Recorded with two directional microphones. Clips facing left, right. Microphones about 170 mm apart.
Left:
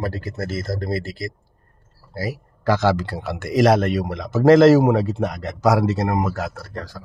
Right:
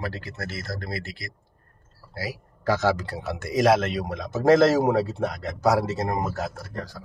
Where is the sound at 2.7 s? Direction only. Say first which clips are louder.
Left 4 dB; 85° left; by 4.1 s 70° left (ahead or behind).